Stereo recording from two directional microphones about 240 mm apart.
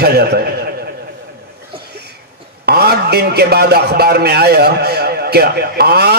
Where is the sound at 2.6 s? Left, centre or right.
Right.